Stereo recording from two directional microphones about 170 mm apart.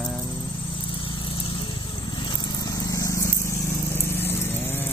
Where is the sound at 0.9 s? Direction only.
30° left (ahead or behind).